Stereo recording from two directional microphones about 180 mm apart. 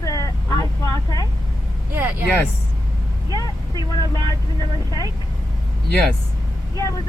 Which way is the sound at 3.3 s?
20° left (ahead or behind).